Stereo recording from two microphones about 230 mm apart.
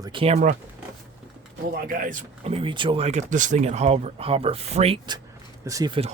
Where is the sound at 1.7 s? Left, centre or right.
Right.